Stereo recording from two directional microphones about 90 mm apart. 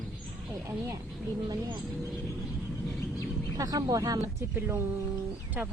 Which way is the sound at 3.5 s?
45° right (ahead or behind).